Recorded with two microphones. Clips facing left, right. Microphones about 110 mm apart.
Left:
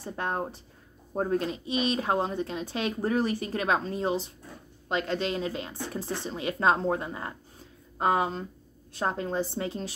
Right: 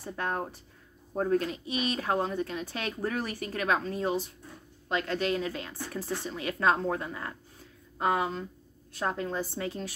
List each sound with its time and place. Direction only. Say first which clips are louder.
0.0 s speech: left 1 dB; 25° left (ahead or behind)